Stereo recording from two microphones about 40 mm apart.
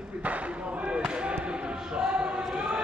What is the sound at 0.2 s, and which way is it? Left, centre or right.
Basketball bounce, right.